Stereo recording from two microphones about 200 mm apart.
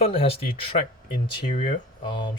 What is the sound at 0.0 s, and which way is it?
Speech, 30° left (ahead or behind).